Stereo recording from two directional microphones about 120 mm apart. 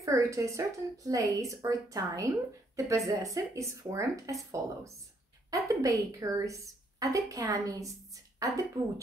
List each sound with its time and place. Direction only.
0.0 s a woman's voice: 25° right (ahead or behind)
5.5 s a woman's voice: 30° right (ahead or behind)